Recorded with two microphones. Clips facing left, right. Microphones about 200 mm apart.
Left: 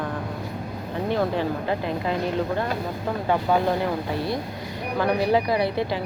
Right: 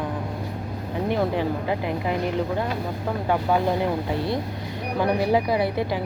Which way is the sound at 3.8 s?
20° right (ahead or behind).